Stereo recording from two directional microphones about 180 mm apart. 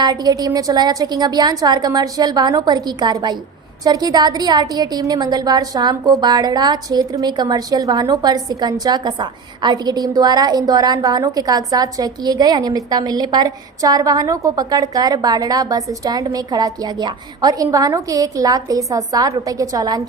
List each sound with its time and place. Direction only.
0.0 s a woman's voice: 20° right (ahead or behind)